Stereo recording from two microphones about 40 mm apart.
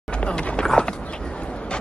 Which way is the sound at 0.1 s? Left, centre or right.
Left.